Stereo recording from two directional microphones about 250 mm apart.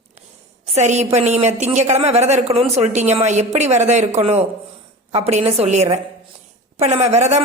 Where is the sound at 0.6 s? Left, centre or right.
Right.